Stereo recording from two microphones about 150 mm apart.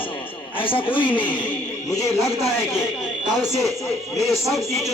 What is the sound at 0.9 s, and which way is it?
Speech, 35° left (ahead or behind).